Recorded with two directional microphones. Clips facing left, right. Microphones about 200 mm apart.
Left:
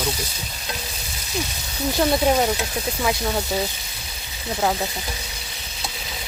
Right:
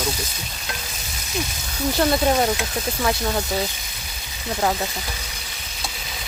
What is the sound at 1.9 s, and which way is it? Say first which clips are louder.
Speech: even; 5° left (ahead or behind).